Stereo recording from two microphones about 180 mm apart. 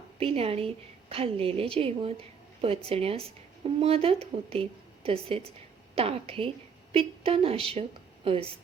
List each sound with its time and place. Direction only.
0.2 s a woman's voice: 35° right (ahead or behind)